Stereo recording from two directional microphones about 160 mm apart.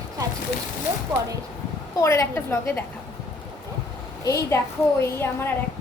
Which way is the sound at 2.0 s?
15° left (ahead or behind).